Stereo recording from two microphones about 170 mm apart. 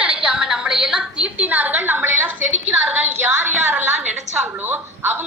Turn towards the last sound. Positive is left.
turn(degrees=-10)  # may be behind; listen again after turning